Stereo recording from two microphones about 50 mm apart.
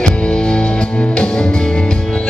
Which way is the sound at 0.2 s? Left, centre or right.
Centre.